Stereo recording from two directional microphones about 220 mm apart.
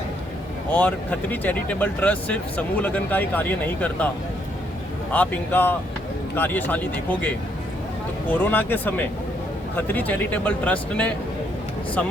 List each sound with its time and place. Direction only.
0.7 s speech: 5° left (ahead or behind)
5.1 s speech: 5° left (ahead or behind)
8.3 s speech: 10° left (ahead or behind)